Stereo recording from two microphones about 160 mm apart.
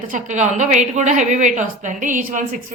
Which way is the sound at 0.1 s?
50° right (ahead or behind).